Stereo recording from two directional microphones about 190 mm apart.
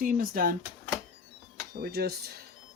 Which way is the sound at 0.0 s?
50° right (ahead or behind).